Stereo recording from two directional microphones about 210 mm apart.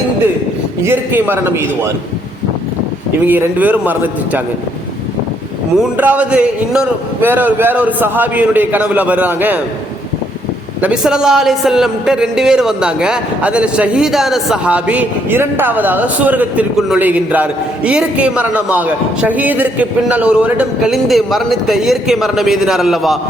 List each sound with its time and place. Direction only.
0.9 s a man's voice: 10° right (ahead or behind)
3.2 s a man's voice: 10° right (ahead or behind)
6.0 s a man's voice: 5° right (ahead or behind)
10.8 s a man's voice: 5° right (ahead or behind)